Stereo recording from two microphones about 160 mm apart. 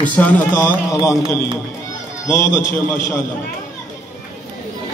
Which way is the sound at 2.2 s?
15° left (ahead or behind).